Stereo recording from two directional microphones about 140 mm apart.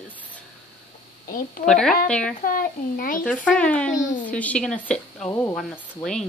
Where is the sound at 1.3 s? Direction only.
90° left.